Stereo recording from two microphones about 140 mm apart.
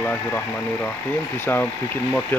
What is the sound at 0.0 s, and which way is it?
Speech, 10° left (ahead or behind).